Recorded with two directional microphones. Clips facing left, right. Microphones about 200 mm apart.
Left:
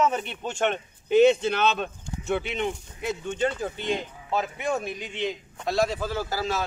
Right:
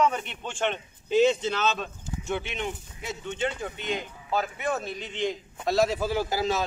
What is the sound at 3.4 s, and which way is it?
Speech, 35° left (ahead or behind).